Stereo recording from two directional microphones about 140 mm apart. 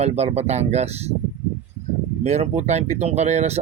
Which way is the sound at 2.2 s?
55° right (ahead or behind).